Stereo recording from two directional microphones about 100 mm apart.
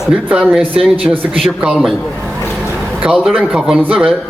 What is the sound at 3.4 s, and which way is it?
Speech, 5° right (ahead or behind).